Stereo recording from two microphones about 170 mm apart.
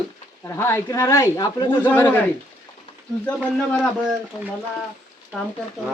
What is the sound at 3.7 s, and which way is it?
Speech, 5° left (ahead or behind).